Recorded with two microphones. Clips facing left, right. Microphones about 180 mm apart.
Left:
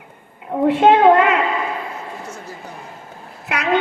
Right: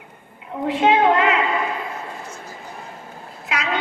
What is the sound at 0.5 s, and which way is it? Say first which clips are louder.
Speech: left 5 dB; 55° left (ahead or behind).